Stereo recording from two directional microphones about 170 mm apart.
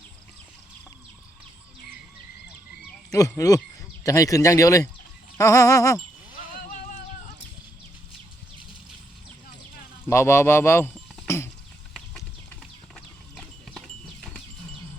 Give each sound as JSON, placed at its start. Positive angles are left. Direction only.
{"t": 3.1, "sound": "speech", "side_deg": 20}
{"t": 10.1, "sound": "speech", "side_deg": 15}
{"t": 13.3, "sound": "clip-clop", "side_deg": 0}